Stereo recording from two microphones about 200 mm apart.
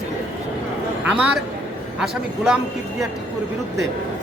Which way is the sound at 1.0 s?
5° right (ahead or behind).